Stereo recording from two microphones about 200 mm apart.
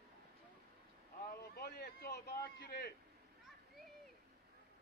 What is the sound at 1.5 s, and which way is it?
A man's voice, 55° left (ahead or behind).